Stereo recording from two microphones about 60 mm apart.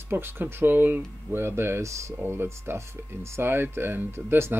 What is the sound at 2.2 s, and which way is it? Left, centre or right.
Speech, right.